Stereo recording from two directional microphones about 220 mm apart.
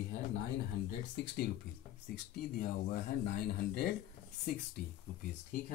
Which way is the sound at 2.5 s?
40° left (ahead or behind).